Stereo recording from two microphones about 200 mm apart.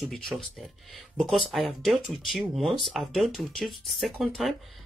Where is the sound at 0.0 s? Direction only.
Centre (ahead or behind).